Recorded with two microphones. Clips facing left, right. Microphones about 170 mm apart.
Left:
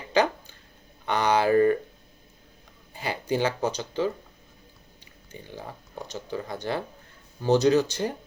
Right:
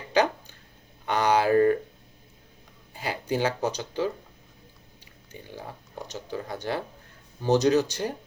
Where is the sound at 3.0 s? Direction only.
10° right (ahead or behind).